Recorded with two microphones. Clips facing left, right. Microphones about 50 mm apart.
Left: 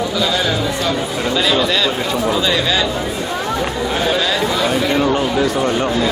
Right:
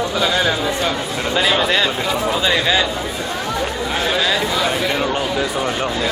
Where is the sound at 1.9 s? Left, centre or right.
Centre.